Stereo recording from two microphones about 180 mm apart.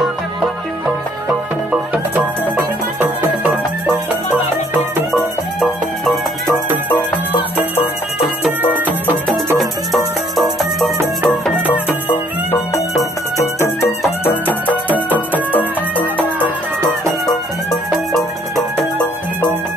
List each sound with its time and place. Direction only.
2.1 s music: 10° right (ahead or behind)
5.1 s music: centre (ahead or behind)
7.5 s music: 10° left (ahead or behind)
8.5 s music: 10° right (ahead or behind)
12.1 s music: 10° left (ahead or behind)